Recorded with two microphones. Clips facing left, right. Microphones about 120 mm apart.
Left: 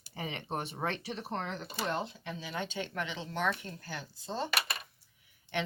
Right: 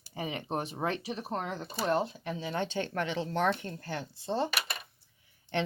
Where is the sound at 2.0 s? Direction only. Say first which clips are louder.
Right 5 dB; 30° right (ahead or behind).